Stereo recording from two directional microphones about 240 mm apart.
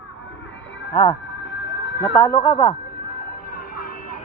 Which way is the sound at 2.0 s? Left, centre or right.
Centre.